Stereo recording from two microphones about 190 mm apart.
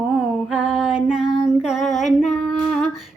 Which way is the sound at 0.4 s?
5° right (ahead or behind).